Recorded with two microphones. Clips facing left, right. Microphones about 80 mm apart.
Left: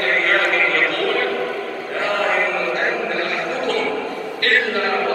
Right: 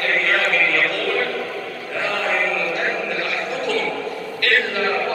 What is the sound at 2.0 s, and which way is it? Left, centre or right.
Chant, left.